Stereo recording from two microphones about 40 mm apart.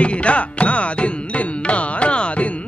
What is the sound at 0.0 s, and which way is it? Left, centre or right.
Music, left.